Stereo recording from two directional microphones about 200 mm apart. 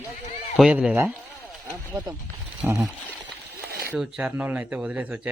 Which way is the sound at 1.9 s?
20° right (ahead or behind).